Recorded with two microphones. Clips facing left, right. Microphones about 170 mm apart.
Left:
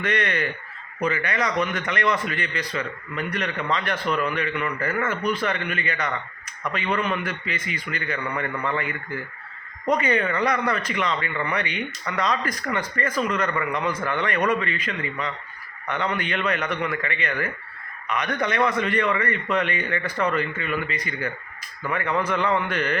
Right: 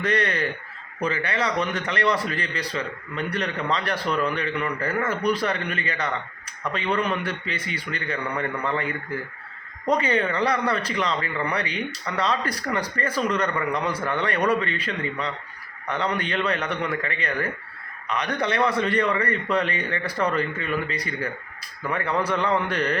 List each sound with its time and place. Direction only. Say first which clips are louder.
0.0 s a man's voice: right 1 dB; 35° right (ahead or behind)